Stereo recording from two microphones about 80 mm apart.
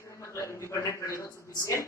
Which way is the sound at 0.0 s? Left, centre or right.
Left.